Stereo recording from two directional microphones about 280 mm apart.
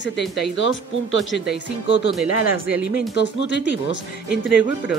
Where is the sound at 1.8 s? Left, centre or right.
Left.